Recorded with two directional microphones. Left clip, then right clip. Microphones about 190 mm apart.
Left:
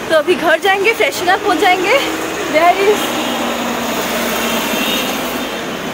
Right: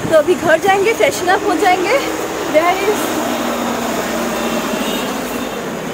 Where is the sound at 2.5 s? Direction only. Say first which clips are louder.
Left 2 dB; 35° left (ahead or behind).